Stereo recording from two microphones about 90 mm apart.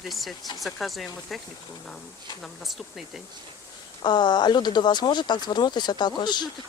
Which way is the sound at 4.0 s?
55° left (ahead or behind).